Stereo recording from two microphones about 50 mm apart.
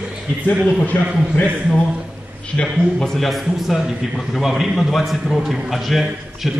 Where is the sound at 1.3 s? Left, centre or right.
Left.